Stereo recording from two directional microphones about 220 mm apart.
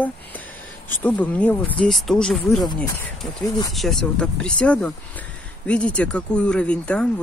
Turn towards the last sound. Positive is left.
turn(degrees=5)  # may be behind; listen again after turning